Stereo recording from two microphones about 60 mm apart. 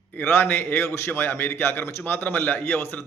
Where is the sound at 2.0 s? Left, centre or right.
Left.